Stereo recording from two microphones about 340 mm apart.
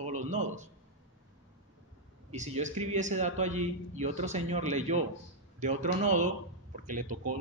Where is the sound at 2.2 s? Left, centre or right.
Centre.